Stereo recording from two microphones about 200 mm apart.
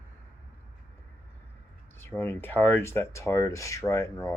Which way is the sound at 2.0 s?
10° left (ahead or behind).